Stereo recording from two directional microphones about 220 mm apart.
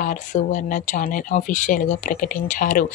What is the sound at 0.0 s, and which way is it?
Speech, 35° left (ahead or behind).